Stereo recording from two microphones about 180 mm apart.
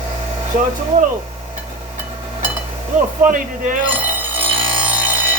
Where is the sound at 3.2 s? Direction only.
45° right (ahead or behind).